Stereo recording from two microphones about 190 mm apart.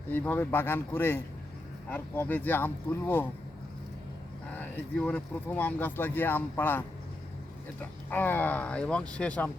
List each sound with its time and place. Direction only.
0.1 s speech: 10° left (ahead or behind)
4.5 s speech: 10° left (ahead or behind)